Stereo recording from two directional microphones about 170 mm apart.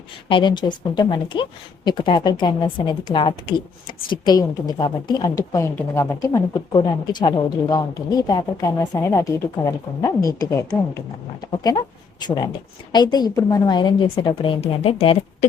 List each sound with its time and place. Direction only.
0.3 s a woman's voice: 30° left (ahead or behind)
12.9 s a woman's voice: 25° left (ahead or behind)